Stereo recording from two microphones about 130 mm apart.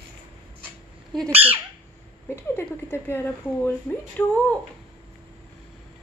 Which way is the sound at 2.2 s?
20° left (ahead or behind).